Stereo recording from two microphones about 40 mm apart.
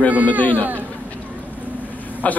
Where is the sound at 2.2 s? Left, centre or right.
Left.